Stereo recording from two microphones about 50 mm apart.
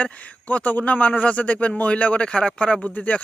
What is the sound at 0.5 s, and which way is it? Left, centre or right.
Speech, left.